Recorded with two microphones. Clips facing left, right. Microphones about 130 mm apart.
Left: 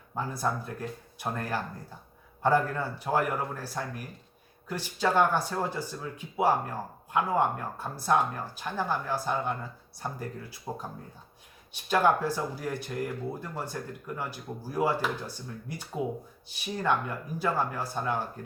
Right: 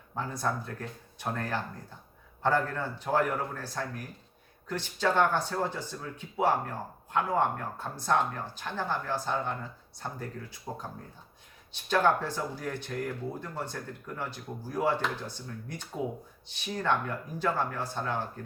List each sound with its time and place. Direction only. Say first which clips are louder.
0.1 s speech: left 1 dB; 10° left (ahead or behind)